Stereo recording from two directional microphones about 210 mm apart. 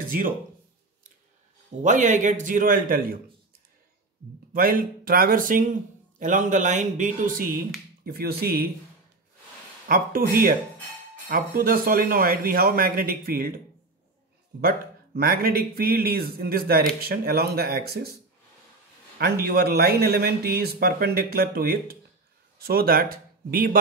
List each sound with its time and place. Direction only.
1.8 s a man's voice: 35° right (ahead or behind)
4.6 s a man's voice: 45° right (ahead or behind)
9.8 s speech: 40° right (ahead or behind)
11.2 s speech: 45° right (ahead or behind)
14.6 s speech: 45° right (ahead or behind)
19.4 s speech: 50° right (ahead or behind)